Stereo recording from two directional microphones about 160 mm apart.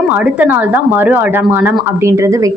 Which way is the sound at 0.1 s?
10° right (ahead or behind).